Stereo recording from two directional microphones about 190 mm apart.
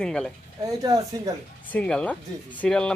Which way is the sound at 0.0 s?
5° left (ahead or behind).